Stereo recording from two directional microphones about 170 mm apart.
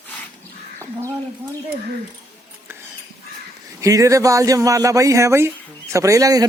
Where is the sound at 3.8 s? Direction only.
20° right (ahead or behind).